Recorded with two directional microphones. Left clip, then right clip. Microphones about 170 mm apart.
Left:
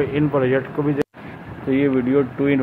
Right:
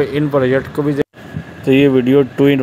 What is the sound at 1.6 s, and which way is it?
Speech, 50° right (ahead or behind).